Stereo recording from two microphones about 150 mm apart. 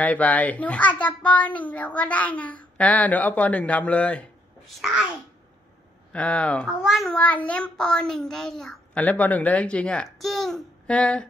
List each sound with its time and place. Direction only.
0.0 s a child's voice: 10° left (ahead or behind)
6.1 s a child's voice: 10° left (ahead or behind)